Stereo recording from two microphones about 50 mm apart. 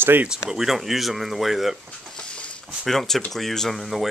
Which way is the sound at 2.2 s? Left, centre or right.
Left.